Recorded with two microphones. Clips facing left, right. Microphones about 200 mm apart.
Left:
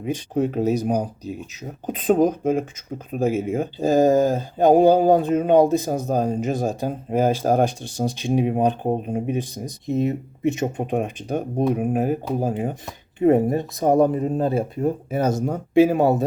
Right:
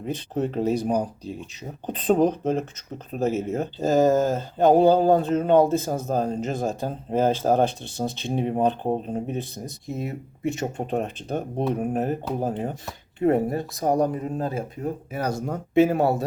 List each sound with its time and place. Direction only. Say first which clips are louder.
0.0 s speech: left 4 dB; 10° left (ahead or behind)
1.9 s speech: left 2 dB; 10° left (ahead or behind)